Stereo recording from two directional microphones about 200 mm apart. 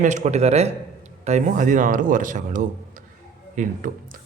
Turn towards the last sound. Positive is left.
turn(degrees=-40)  # may be behind; listen again after turning